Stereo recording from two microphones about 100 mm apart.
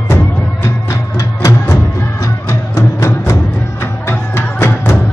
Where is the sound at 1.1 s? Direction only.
30° left (ahead or behind).